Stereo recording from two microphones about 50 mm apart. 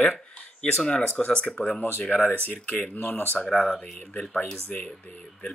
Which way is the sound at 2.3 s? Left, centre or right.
Left.